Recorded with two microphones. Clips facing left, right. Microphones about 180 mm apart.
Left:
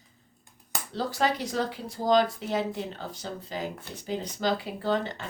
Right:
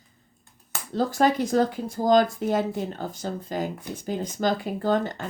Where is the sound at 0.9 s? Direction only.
50° right (ahead or behind).